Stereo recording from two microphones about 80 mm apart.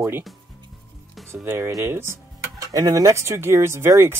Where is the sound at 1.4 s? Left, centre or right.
Right.